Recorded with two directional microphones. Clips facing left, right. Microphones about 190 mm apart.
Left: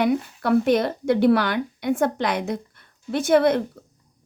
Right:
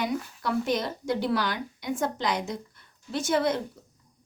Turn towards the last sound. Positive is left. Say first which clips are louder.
# left 8 dB
turn(degrees=60)  # may be behind; listen again after turning